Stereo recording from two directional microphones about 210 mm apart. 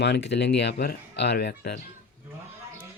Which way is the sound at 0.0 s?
55° left (ahead or behind).